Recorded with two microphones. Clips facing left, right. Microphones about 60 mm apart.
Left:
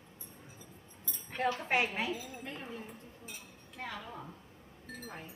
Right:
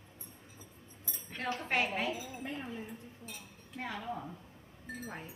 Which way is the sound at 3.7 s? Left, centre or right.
Centre.